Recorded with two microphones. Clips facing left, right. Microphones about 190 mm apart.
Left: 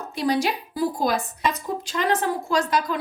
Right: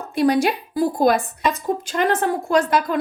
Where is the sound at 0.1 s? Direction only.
55° right (ahead or behind).